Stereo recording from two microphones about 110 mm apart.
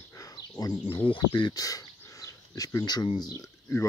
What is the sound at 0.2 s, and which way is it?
Bird, 30° left (ahead or behind).